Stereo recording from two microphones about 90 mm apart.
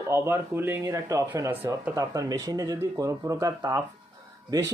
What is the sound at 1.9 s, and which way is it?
Speech, 40° right (ahead or behind).